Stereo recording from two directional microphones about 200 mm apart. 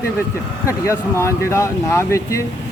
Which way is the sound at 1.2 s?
15° left (ahead or behind).